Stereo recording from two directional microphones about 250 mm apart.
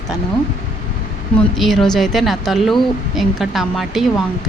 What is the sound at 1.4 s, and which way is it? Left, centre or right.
Speech, centre.